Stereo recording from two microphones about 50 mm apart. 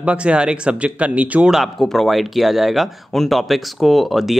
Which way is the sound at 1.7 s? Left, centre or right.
Centre.